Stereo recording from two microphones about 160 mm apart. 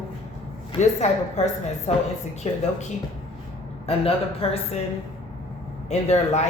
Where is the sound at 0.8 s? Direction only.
45° left (ahead or behind).